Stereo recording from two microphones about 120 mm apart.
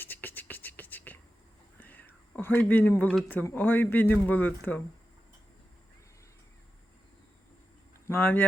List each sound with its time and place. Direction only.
0.0 s beatboxing: 15° left (ahead or behind)
1.8 s whispering: 15° left (ahead or behind)
3.2 s speech: 15° left (ahead or behind)
8.0 s speech: 15° left (ahead or behind)